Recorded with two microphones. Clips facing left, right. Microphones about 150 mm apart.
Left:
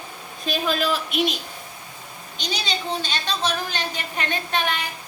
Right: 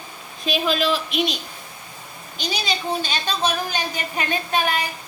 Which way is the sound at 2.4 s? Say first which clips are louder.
Right 2 dB; 10° right (ahead or behind).